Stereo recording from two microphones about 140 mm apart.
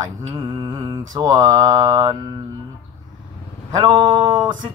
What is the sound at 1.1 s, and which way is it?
Speech, 25° right (ahead or behind).